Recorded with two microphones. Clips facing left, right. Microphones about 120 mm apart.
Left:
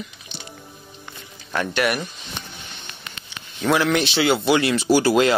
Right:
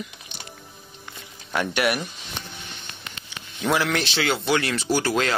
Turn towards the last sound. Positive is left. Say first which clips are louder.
# left 6 dB
turn(degrees=10)  # may be behind; listen again after turning